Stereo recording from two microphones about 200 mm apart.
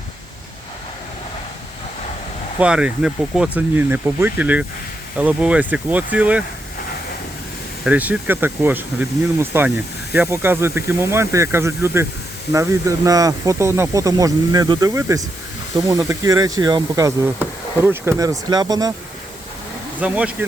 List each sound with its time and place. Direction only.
2.6 s speech: 5° right (ahead or behind)
7.9 s speech: 5° right (ahead or behind)
13.1 s speech: 15° right (ahead or behind)
20.0 s speech: 5° right (ahead or behind)